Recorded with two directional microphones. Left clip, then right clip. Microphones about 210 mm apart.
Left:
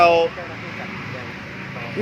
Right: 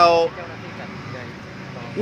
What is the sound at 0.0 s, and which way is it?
Vehicle, 25° right (ahead or behind).